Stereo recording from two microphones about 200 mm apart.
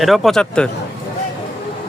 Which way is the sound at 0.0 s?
Centre (ahead or behind).